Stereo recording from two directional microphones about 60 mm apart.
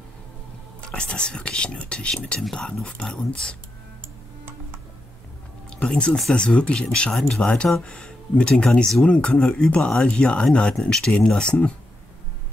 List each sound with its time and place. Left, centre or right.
0.8 s speech: centre
5.7 s speech: centre